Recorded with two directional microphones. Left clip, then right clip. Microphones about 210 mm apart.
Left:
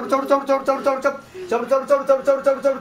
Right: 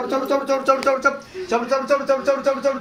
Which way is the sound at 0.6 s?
15° left (ahead or behind).